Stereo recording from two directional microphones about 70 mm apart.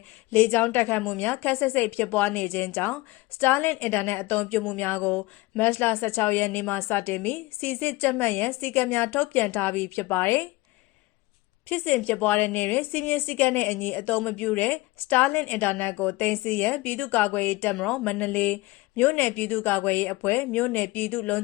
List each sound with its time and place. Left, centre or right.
0.3 s a woman's voice: left
5.6 s a woman's voice: left
11.7 s a woman's voice: left
17.7 s speech: centre
18.0 s a woman's voice: left
20.5 s a woman's voice: left